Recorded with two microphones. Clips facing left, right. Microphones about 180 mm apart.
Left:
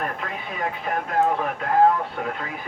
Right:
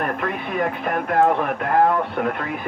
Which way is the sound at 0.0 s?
60° right (ahead or behind).